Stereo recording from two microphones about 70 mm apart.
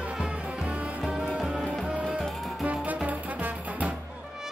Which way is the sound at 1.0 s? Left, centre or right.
Centre.